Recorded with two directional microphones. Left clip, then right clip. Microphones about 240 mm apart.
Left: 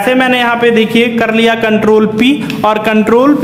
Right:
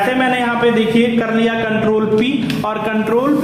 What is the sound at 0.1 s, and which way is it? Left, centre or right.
A man's voice, left.